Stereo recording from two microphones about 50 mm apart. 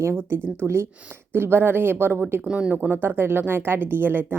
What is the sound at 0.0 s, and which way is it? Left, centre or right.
Speech, right.